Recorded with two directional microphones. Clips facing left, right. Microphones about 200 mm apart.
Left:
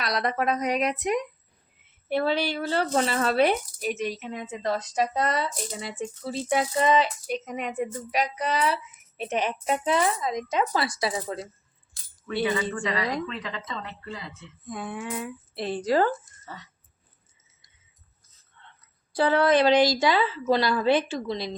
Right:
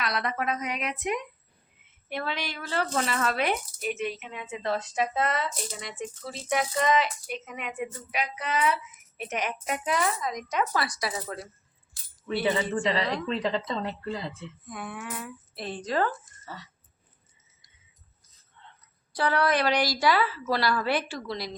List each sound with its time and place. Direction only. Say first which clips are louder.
0.0 s speech: left 4 dB; 35° left (ahead or behind)
12.3 s a woman's voice: even; 25° right (ahead or behind)
14.7 s a woman's voice: left 5 dB; 25° left (ahead or behind)
19.1 s a woman's voice: left 5 dB; 25° left (ahead or behind)